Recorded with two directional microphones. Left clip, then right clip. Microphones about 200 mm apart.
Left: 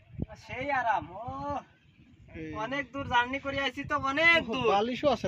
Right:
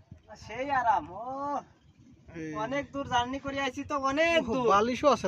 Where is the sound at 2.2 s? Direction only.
10° right (ahead or behind).